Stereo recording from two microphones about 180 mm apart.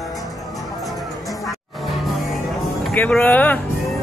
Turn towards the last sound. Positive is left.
turn(degrees=10)  # may be behind; listen again after turning